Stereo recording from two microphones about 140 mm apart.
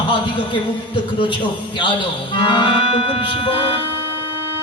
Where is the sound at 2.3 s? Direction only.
35° left (ahead or behind).